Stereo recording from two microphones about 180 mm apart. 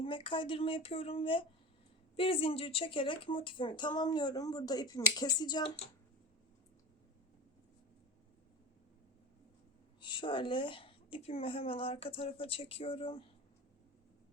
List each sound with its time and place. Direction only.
0.0 s speech: 30° left (ahead or behind)
10.0 s a woman's voice: 25° left (ahead or behind)